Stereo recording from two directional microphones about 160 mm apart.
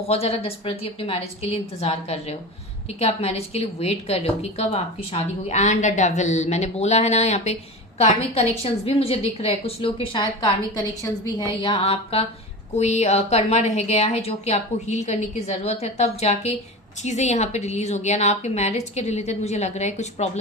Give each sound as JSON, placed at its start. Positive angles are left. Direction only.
{"t": 0.1, "sound": "a woman's voice", "side_deg": 40}
{"t": 11.6, "sound": "a woman's voice", "side_deg": 35}